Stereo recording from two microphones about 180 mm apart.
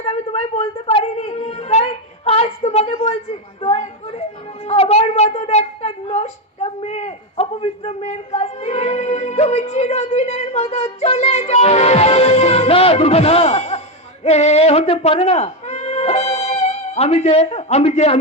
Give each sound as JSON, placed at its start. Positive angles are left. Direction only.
{"t": 0.0, "sound": "a sound", "side_deg": 35}
{"t": 4.6, "sound": "cat", "side_deg": 35}
{"t": 14.3, "sound": "speech", "side_deg": 35}